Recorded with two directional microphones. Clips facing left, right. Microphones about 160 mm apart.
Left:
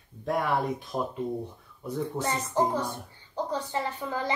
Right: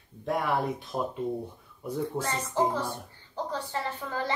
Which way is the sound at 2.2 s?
10° right (ahead or behind).